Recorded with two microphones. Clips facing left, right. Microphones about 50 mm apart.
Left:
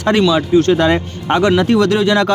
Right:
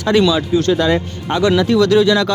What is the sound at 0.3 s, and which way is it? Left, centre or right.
Speech, left.